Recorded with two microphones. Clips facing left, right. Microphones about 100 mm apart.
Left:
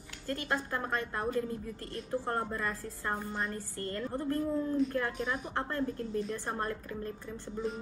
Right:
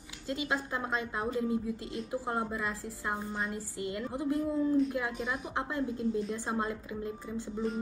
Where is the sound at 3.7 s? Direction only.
15° right (ahead or behind).